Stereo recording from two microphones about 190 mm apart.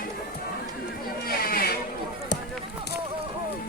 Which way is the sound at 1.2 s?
50° left (ahead or behind).